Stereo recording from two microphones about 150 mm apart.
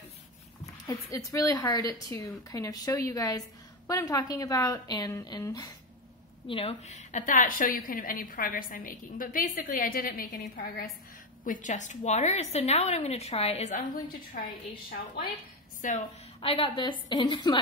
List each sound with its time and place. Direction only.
0.8 s a woman's voice: 20° left (ahead or behind)
6.4 s a woman's voice: 40° left (ahead or behind); by 10.9 s 75° left (ahead or behind)
11.4 s a woman's voice: 60° left (ahead or behind)
14.3 s a woman's voice: 70° left (ahead or behind)
15.8 s a woman's voice: 60° left (ahead or behind)
16.3 s a woman's voice: 35° left (ahead or behind)